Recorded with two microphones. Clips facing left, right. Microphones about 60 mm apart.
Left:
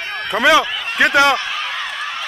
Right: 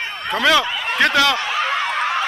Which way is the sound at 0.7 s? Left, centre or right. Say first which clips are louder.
Right 2 dB; centre.